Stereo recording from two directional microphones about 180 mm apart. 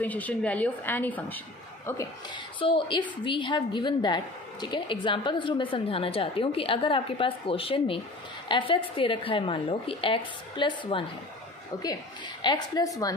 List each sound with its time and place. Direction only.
0.0 s a woman's voice: 10° left (ahead or behind)
2.3 s a woman's voice: 25° left (ahead or behind)